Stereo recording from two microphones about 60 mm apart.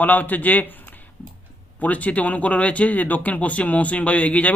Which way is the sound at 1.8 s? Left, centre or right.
Left.